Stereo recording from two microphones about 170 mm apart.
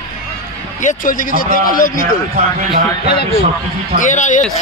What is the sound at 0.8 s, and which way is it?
Speech, 50° left (ahead or behind).